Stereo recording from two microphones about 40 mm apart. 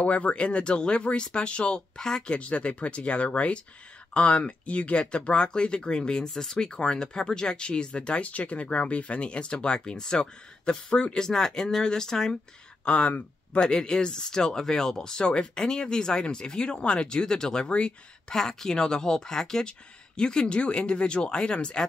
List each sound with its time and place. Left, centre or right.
0.0 s speech: left; by 2.3 s centre
2.3 s speech: left; by 12.4 s centre
12.8 s speech: left